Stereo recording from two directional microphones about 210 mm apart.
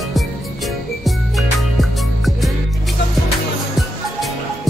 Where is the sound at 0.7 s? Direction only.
Centre (ahead or behind).